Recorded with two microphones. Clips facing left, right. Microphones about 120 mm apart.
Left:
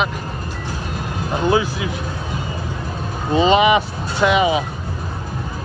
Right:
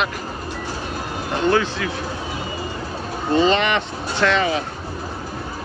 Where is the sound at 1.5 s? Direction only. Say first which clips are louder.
Left 1 dB; 10° left (ahead or behind).